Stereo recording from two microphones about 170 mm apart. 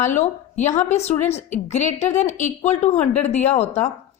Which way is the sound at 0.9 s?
40° left (ahead or behind).